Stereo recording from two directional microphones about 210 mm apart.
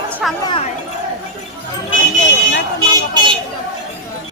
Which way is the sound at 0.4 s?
25° left (ahead or behind).